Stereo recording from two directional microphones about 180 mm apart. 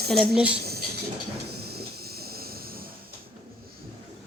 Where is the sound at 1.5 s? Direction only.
60° right (ahead or behind).